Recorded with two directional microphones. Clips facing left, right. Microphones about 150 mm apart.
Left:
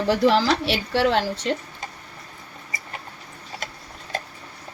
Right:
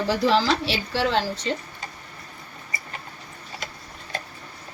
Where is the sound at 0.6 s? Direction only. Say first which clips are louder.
Left 3 dB; 60° left (ahead or behind).